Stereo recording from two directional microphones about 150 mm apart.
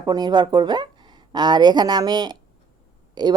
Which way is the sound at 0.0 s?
25° right (ahead or behind).